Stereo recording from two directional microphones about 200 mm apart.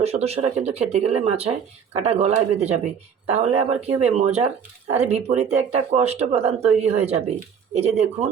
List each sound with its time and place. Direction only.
0.0 s speech: 30° right (ahead or behind)